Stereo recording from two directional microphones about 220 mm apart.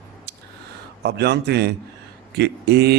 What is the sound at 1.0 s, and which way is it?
Speech, 50° right (ahead or behind).